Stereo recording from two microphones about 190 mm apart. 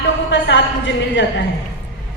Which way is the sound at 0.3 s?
75° left (ahead or behind).